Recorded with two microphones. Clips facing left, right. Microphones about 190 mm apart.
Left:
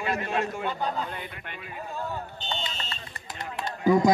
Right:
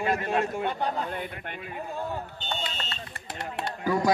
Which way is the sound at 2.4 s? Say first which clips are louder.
Even; 60° right (ahead or behind).